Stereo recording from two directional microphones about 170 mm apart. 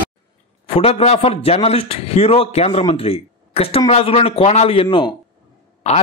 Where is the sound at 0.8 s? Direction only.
35° left (ahead or behind).